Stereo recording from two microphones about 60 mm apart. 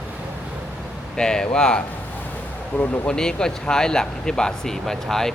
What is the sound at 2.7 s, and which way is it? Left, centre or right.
Speech, left.